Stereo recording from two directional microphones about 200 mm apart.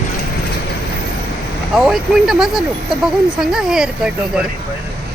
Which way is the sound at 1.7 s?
Centre (ahead or behind).